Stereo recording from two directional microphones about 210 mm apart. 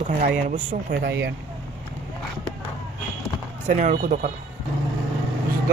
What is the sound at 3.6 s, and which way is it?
Speech, 35° right (ahead or behind).